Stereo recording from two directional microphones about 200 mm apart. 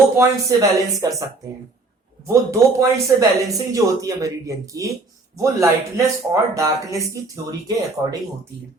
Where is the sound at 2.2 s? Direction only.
15° right (ahead or behind).